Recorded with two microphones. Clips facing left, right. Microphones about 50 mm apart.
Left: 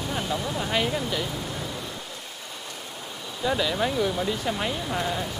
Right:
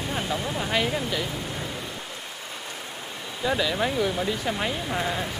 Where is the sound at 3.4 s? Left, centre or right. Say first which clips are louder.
Even; centre.